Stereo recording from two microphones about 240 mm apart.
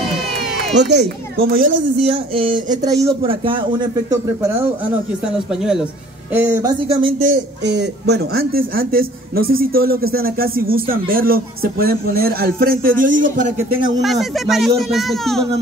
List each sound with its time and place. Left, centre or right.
0.7 s speech: right
2.3 s speech: right
5.2 s speech: centre; by 7.2 s right
7.2 s speech: right
14.0 s speech: centre